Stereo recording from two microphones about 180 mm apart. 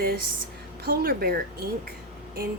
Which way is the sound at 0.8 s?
55° right (ahead or behind).